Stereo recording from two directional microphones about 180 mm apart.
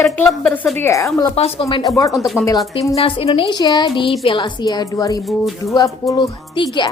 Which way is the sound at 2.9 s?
35° left (ahead or behind).